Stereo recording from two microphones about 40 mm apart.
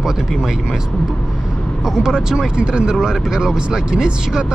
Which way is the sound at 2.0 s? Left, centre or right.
Centre.